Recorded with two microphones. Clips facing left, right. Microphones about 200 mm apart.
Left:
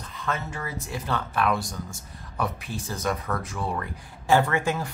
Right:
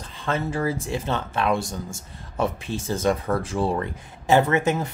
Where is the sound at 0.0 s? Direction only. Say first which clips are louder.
Right 5 dB; 30° right (ahead or behind).